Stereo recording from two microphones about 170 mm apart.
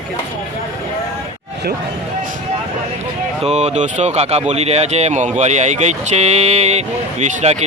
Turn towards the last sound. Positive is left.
turn(degrees=-40)  # may be behind; listen again after turning